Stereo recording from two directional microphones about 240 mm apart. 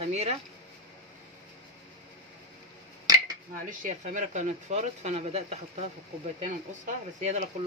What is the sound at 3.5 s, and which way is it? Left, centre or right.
Speech, right.